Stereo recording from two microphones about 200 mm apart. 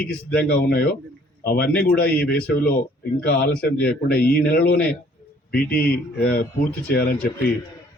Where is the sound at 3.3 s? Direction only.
50° left (ahead or behind).